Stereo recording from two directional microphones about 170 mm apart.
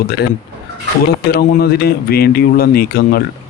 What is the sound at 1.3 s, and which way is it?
Speech, 65° left (ahead or behind).